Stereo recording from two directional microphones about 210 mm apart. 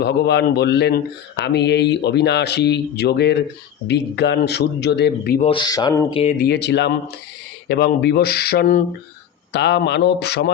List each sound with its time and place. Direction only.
0.0 s speech: 50° left (ahead or behind)
5.4 s speech: 25° left (ahead or behind)
6.1 s speech: 25° left (ahead or behind)
6.4 s speech: 50° left (ahead or behind)
9.5 s a man's voice: 55° left (ahead or behind)